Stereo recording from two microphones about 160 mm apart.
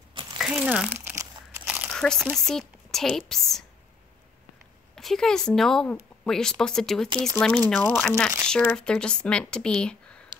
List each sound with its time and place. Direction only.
0.1 s crumpling: 30° right (ahead or behind)
0.4 s crumpling: 5° right (ahead or behind)
1.9 s a sound: 5° left (ahead or behind)
2.3 s a woman's voice: 5° left (ahead or behind)
4.9 s speech: centre (ahead or behind)
7.1 s speech: 20° right (ahead or behind)
7.3 s speech: 10° left (ahead or behind)